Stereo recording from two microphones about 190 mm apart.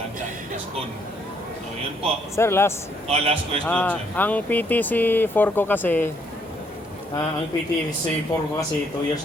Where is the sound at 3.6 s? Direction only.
10° left (ahead or behind).